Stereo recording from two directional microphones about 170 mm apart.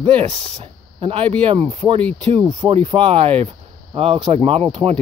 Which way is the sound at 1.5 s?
30° right (ahead or behind).